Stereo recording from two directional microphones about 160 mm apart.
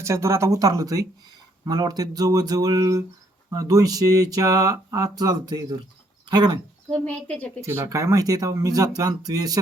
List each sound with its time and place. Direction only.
0.0 s speech: 20° right (ahead or behind)
6.9 s speech: 10° left (ahead or behind)
7.6 s speech: 20° right (ahead or behind)